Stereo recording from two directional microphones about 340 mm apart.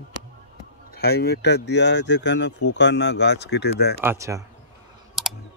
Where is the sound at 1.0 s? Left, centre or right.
Left.